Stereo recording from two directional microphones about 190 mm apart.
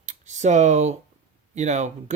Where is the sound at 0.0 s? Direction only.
40° right (ahead or behind).